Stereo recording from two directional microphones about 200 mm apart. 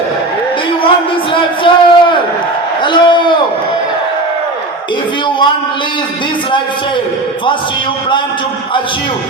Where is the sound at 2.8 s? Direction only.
25° left (ahead or behind).